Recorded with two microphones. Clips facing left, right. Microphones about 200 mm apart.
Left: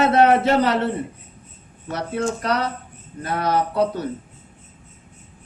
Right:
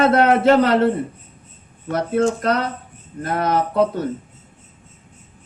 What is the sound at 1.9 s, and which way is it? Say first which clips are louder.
A man's voice: right 6 dB; 50° right (ahead or behind).